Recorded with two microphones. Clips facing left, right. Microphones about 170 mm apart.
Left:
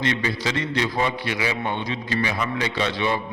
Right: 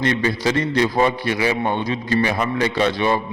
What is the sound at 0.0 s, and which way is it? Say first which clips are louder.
A man's voice: right 5 dB; 40° right (ahead or behind).